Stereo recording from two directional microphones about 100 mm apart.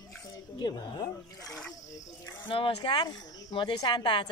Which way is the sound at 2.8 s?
45° left (ahead or behind).